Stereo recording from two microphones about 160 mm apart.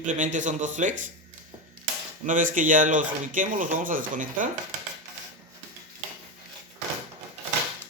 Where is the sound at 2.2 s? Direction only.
55° right (ahead or behind).